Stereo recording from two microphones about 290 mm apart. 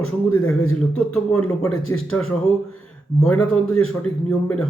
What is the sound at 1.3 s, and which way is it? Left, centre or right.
Speech, centre.